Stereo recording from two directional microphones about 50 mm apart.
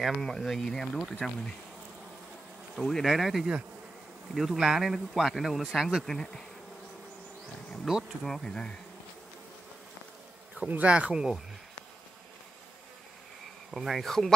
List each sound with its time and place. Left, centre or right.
0.0 s speech: centre
2.7 s speech: centre
6.0 s bee: centre
7.9 s speech: centre
10.6 s speech: right
11.1 s speech: centre
13.7 s speech: centre